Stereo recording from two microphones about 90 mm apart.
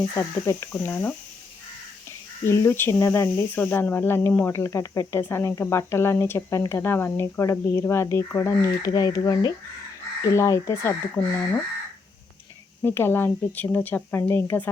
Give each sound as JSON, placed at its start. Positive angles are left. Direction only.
{"t": 0.2, "sound": "speech", "side_deg": 30}
{"t": 0.8, "sound": "speech", "side_deg": 20}
{"t": 2.4, "sound": "speech", "side_deg": 30}
{"t": 10.2, "sound": "speech", "side_deg": 35}
{"t": 12.8, "sound": "speech", "side_deg": 25}
{"t": 14.2, "sound": "speech", "side_deg": 30}